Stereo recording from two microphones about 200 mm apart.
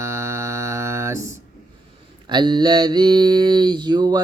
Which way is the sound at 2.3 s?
20° right (ahead or behind).